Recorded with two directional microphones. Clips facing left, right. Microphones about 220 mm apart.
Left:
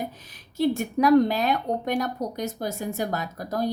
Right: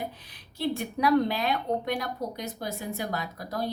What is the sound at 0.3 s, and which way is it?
A woman's voice, 45° left (ahead or behind).